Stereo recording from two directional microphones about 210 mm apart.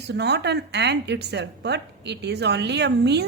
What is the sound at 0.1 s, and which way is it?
A woman's voice, 50° right (ahead or behind).